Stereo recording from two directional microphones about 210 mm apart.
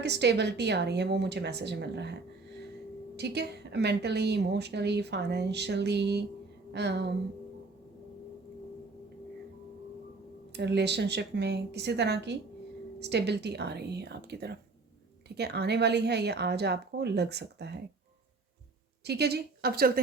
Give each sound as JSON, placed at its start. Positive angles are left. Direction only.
{"t": 0.0, "sound": "speech", "side_deg": -55}
{"t": 10.5, "sound": "speech", "side_deg": -55}
{"t": 19.0, "sound": "speech", "side_deg": -50}